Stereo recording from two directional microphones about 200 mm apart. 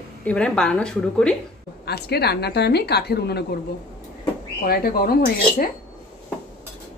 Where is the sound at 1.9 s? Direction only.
55° left (ahead or behind).